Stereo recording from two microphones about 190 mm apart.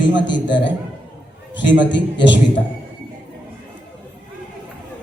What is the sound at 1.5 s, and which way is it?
A man's voice, 70° left (ahead or behind).